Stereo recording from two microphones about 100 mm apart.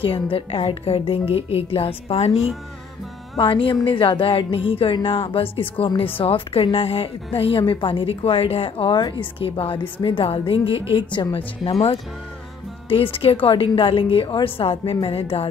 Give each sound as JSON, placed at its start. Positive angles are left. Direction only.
{"t": 0.0, "sound": "a woman's voice", "side_deg": 65}
{"t": 1.3, "sound": "a woman's voice", "side_deg": 75}
{"t": 3.3, "sound": "a woman's voice", "side_deg": 60}
{"t": 12.9, "sound": "a woman's voice", "side_deg": 70}